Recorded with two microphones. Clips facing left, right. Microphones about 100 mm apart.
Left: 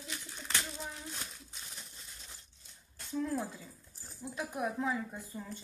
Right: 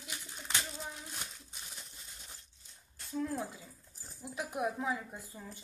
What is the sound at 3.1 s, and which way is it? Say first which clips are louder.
Speech: left 1 dB; centre (ahead or behind).